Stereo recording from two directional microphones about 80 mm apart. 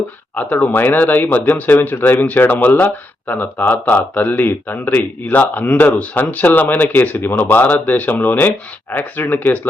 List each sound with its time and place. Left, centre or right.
0.3 s speech: left